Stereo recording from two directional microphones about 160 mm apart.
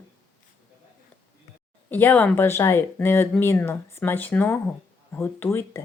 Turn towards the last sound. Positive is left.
turn(degrees=15)  # may be behind; listen again after turning